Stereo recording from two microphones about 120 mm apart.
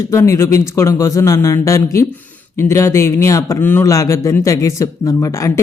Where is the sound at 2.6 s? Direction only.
25° left (ahead or behind).